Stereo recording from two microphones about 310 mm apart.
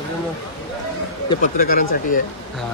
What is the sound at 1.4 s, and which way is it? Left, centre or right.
Speech, left.